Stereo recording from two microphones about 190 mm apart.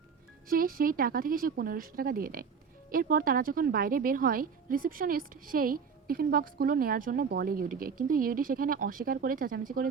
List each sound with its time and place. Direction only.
0.4 s a woman's voice: 50° right (ahead or behind)